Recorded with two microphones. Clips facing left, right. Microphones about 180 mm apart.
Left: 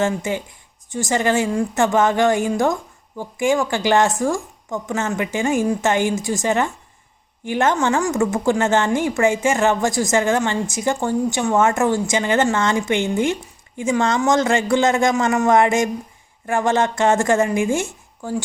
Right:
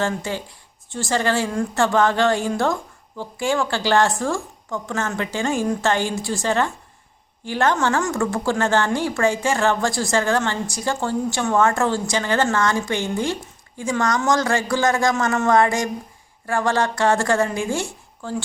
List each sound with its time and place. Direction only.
0.2 s a woman's voice: 15° left (ahead or behind)